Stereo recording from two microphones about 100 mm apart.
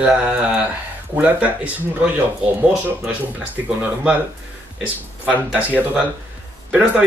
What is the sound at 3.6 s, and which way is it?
Speech, 15° right (ahead or behind).